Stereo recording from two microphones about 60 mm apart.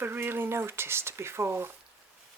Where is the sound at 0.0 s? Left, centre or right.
Right.